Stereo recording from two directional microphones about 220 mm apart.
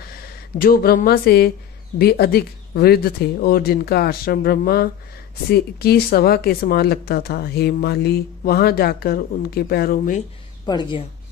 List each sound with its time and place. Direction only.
0.6 s speech: 40° left (ahead or behind)
10.6 s a woman's voice: 20° left (ahead or behind)